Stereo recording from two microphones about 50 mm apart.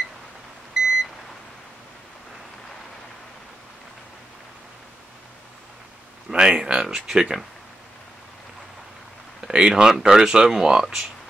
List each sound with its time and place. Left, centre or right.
0.8 s beep: centre
6.3 s speech: centre
9.4 s speech: centre